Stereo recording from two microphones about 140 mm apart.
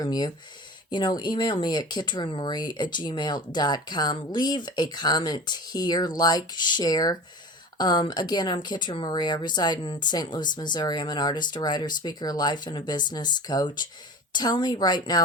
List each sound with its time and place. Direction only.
0.0 s a woman's voice: 30° left (ahead or behind)